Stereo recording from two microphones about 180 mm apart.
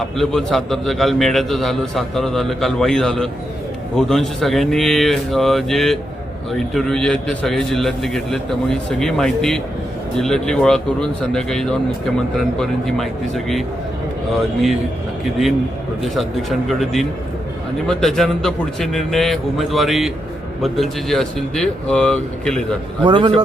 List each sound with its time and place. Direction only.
0.0 s speech: centre (ahead or behind)
16.1 s speech: centre (ahead or behind)
23.0 s a man's voice: 25° right (ahead or behind)